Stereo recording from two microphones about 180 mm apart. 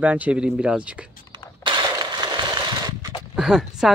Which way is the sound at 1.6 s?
25° right (ahead or behind).